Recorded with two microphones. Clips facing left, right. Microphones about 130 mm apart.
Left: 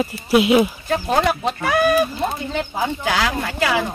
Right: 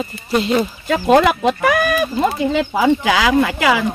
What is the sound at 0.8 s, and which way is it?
Speech, 90° right.